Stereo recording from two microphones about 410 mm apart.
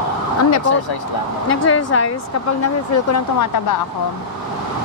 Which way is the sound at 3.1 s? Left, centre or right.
Left.